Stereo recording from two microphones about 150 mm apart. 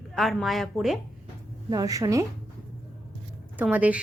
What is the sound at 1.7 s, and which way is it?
Speech, 25° right (ahead or behind).